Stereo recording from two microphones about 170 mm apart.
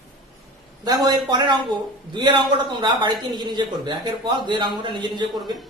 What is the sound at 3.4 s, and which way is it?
A man's voice, 25° right (ahead or behind).